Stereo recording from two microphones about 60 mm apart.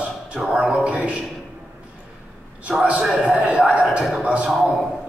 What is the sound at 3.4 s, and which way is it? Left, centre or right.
A man's voice, right.